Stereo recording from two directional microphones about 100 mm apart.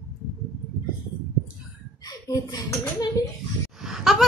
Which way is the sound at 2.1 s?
40° left (ahead or behind).